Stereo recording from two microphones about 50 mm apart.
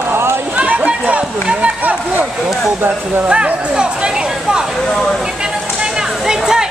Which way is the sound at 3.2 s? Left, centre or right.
Right.